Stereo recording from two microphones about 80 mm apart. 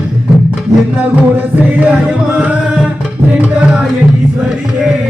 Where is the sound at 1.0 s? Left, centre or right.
Centre.